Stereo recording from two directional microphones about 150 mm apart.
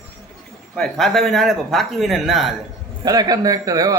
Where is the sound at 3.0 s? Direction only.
25° right (ahead or behind).